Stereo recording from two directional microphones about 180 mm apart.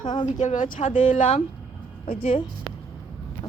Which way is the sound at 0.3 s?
45° left (ahead or behind).